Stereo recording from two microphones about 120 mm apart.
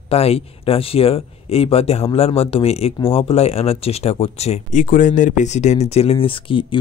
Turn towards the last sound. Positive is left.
turn(degrees=45)  # may be behind; listen again after turning